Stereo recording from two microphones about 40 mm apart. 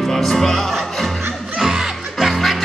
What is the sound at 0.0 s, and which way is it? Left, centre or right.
Music, centre.